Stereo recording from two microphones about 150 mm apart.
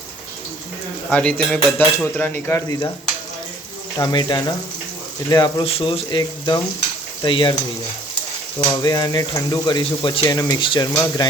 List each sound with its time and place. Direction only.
1.1 s cutlery: 5° left (ahead or behind)
3.9 s speech: 25° left (ahead or behind)
5.6 s speech: 40° left (ahead or behind)
8.6 s speech: 25° left (ahead or behind)